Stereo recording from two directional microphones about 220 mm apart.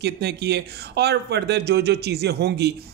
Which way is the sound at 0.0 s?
50° right (ahead or behind).